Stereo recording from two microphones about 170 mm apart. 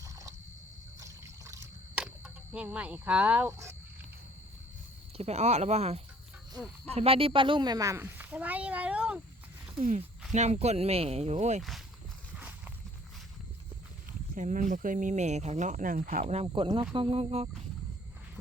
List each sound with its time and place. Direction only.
0.0 s a sound: 20° right (ahead or behind)
0.9 s trickle: 20° right (ahead or behind)
2.0 s speech: 5° right (ahead or behind)
5.1 s speech: 40° right (ahead or behind); by 9.2 s 5° right (ahead or behind)
10.3 s speech: 40° right (ahead or behind)
12.4 s walk: 10° right (ahead or behind)
14.1 s speech: 50° right (ahead or behind)
16.2 s speech: 40° right (ahead or behind)